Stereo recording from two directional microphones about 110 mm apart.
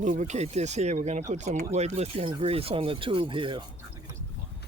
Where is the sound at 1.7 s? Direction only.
80° right.